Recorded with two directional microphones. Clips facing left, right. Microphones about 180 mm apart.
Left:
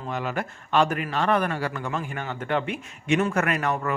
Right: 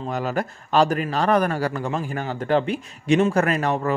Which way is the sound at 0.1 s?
40° right (ahead or behind).